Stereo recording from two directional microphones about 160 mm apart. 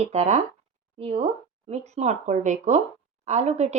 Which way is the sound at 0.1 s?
45° right (ahead or behind).